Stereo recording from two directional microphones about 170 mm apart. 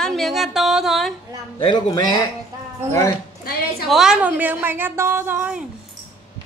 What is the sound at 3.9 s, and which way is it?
A woman's voice, 5° right (ahead or behind).